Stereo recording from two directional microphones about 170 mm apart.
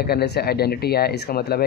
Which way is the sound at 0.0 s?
70° left (ahead or behind).